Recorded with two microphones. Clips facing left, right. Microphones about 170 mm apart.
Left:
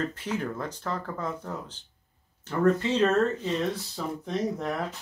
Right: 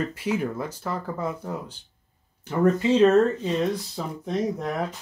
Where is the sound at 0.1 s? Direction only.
10° right (ahead or behind).